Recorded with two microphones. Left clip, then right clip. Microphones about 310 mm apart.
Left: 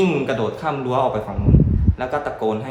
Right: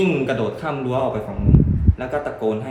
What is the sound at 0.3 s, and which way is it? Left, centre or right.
Speech, centre.